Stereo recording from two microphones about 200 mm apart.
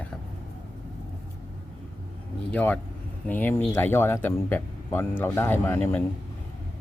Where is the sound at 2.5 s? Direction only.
5° left (ahead or behind).